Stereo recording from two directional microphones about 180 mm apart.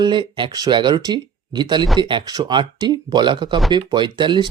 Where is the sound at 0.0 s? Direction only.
25° right (ahead or behind).